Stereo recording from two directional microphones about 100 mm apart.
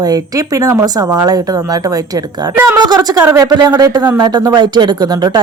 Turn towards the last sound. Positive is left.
turn(degrees=-45)  # may be behind; listen again after turning